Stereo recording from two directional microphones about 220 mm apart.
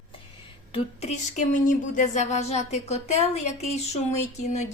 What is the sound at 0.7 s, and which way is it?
A woman's voice, 30° left (ahead or behind).